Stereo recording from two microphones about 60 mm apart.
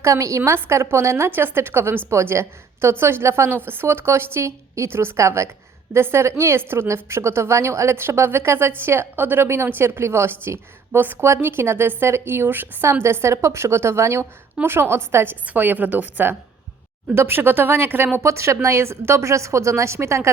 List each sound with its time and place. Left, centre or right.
0.0 s a woman's voice: right
15.4 s a woman's voice: right
17.2 s a woman's voice: right
18.2 s a woman's voice: right